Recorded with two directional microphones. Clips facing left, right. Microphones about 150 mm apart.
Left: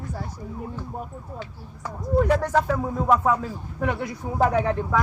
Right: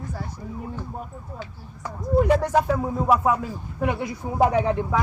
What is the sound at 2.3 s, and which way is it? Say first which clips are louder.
Speech: right 1 dB; 15° right (ahead or behind).